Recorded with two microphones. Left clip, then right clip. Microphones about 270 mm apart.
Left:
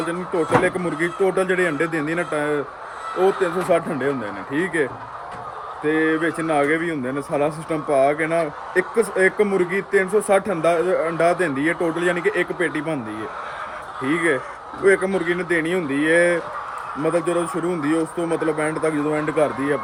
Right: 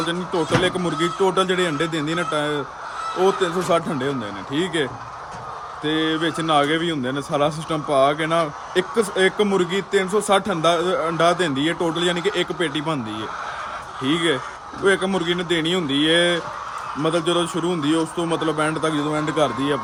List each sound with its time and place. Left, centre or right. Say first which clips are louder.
0.1 s speech: left 5 dB; centre
14.0 s speech: left 1 dB; centre